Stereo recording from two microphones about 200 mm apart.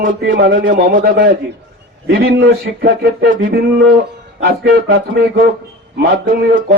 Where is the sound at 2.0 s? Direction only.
50° right (ahead or behind); by 3.6 s 65° right (ahead or behind).